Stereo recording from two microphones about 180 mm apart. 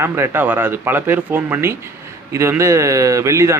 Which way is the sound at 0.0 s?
10° right (ahead or behind).